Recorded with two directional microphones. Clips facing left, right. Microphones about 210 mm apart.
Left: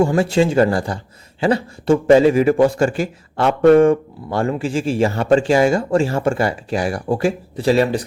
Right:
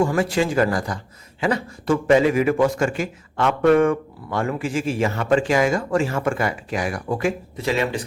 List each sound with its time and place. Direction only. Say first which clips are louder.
0.0 s a man's voice: left 4 dB; 25° left (ahead or behind)